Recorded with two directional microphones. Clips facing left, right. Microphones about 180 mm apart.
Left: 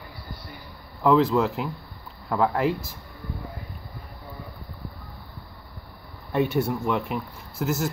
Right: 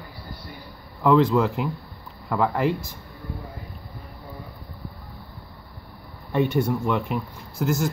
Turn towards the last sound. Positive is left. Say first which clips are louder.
# right 2 dB
turn(degrees=5)  # may be behind; listen again after turning